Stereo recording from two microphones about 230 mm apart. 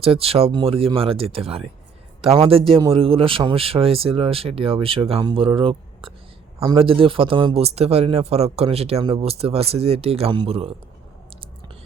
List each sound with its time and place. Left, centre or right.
0.0 s speech: right